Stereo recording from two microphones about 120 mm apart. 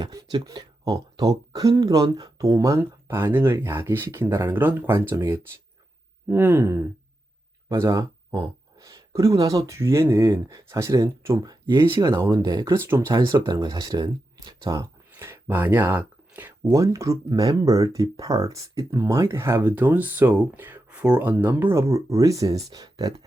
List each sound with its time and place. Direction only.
0.0 s speech: 35° right (ahead or behind)
11.6 s speech: 40° right (ahead or behind)
11.9 s speech: 25° right (ahead or behind)
15.1 s speech: 20° right (ahead or behind)